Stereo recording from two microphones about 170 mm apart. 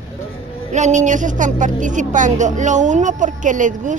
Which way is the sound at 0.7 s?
45° right (ahead or behind).